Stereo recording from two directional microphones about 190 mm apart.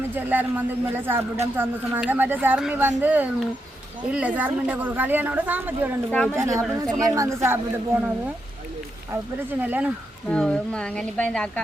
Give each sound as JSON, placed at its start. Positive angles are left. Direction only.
{"t": 0.1, "sound": "a woman's voice", "side_deg": -10}
{"t": 6.1, "sound": "a woman's voice", "side_deg": 5}
{"t": 6.3, "sound": "a woman's voice", "side_deg": -15}
{"t": 9.5, "sound": "a woman's voice", "side_deg": -10}
{"t": 10.2, "sound": "speech", "side_deg": 5}